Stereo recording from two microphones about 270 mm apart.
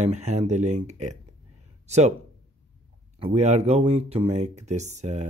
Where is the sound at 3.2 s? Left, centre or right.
Right.